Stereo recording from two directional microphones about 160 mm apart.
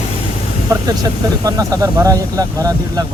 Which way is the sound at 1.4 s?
20° right (ahead or behind).